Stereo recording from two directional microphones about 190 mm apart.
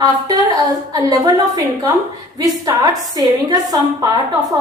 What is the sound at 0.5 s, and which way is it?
A woman's voice, 20° right (ahead or behind).